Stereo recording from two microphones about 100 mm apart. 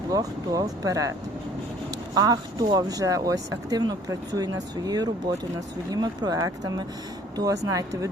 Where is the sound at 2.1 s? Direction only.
40° right (ahead or behind).